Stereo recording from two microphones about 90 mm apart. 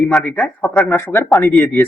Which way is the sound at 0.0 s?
Centre (ahead or behind).